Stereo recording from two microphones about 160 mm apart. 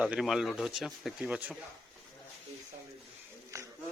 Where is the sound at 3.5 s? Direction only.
20° right (ahead or behind).